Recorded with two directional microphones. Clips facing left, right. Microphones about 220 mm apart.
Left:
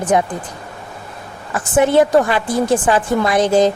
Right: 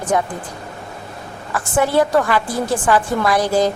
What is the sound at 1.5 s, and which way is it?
A woman's voice, 20° left (ahead or behind).